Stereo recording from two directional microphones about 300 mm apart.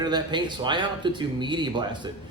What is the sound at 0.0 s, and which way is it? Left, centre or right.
Speech, centre.